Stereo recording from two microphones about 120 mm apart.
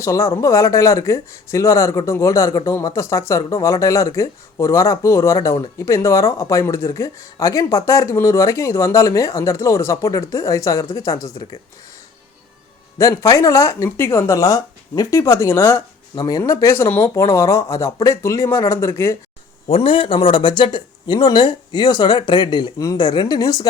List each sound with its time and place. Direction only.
0.0 s speech: 25° left (ahead or behind)
13.0 s speech: 25° left (ahead or behind)
16.1 s speech: 35° left (ahead or behind)
19.6 s speech: 50° left (ahead or behind)
22.8 s speech: 30° left (ahead or behind)
23.0 s speech: 40° left (ahead or behind)